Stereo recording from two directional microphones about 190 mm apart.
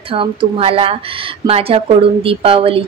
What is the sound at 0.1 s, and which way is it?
A woman's voice, 30° right (ahead or behind).